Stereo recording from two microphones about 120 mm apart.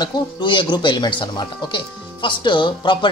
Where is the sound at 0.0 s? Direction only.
40° left (ahead or behind).